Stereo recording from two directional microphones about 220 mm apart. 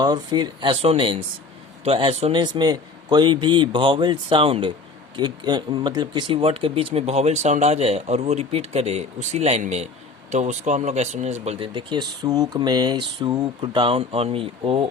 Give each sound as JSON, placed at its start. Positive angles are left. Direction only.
{"t": 0.0, "sound": "speech", "side_deg": -20}